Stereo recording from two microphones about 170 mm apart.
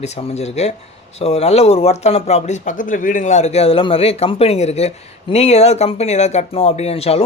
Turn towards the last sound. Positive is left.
turn(degrees=35)  # may be behind; listen again after turning